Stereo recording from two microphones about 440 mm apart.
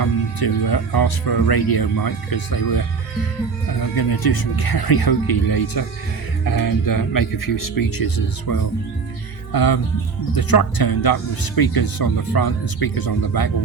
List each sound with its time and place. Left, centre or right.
0.0 s speech: left
3.9 s speech: left